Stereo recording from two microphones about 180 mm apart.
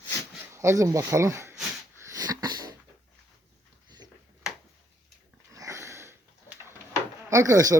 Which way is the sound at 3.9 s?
25° right (ahead or behind).